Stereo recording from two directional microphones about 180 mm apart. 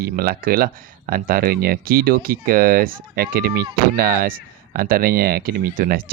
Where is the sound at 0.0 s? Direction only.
55° right (ahead or behind).